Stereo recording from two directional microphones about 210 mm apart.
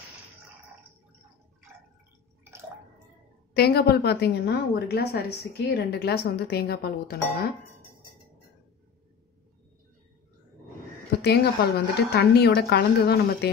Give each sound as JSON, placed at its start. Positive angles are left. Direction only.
{"t": 3.5, "sound": "a woman's voice", "side_deg": 50}
{"t": 11.2, "sound": "a woman's voice", "side_deg": 50}